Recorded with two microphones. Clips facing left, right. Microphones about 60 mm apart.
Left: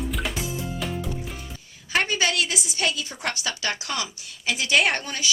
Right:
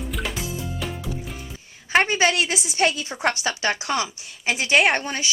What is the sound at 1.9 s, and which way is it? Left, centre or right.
A woman's voice, right.